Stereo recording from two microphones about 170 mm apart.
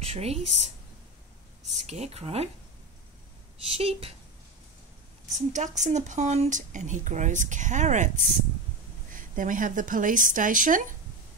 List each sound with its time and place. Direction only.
0.0 s speech: 35° right (ahead or behind)
3.6 s speech: 35° right (ahead or behind)
5.5 s speech: 45° right (ahead or behind)